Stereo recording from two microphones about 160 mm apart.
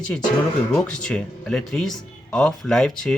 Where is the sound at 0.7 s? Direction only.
5° left (ahead or behind).